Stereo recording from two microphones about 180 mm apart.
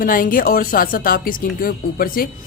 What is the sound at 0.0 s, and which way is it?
Speech, 50° left (ahead or behind).